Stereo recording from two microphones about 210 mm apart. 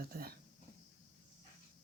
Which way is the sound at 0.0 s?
45° right (ahead or behind).